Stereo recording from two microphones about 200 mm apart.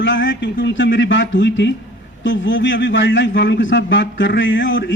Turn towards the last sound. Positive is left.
turn(degrees=70)  # may be behind; listen again after turning